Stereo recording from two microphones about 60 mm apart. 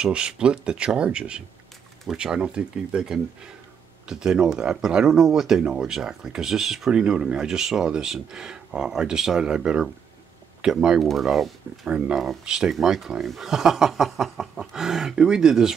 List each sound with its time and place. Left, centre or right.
0.0 s speech: centre
11.0 s speech: centre
11.8 s speech: centre